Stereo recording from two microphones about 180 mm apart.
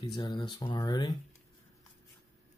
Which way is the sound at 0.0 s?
20° left (ahead or behind).